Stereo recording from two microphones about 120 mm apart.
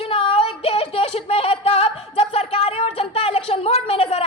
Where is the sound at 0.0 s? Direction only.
50° left (ahead or behind).